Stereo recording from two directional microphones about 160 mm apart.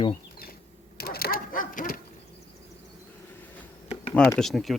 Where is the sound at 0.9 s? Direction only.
75° left (ahead or behind).